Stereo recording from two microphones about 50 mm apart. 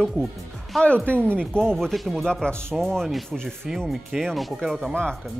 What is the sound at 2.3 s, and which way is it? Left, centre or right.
Speech, centre.